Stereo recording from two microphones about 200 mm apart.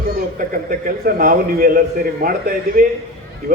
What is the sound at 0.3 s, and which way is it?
A man's voice, 45° right (ahead or behind).